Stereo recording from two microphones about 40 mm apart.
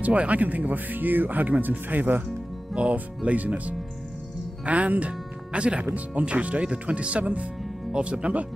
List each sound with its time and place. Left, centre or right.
0.0 s speech: right
2.7 s speech: right